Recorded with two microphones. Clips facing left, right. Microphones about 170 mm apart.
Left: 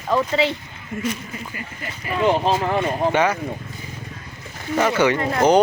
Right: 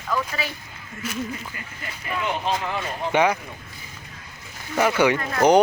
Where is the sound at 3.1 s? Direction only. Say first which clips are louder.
Right 2 dB; 10° right (ahead or behind).